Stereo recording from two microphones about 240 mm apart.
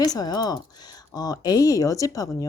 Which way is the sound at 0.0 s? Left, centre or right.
Centre.